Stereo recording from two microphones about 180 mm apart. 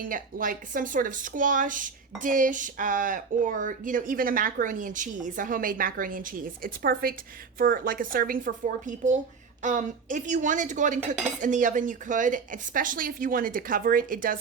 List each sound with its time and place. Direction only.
0.0 s speech: 50° right (ahead or behind)